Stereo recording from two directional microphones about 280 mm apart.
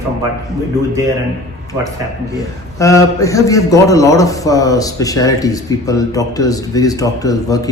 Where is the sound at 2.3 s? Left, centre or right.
Centre.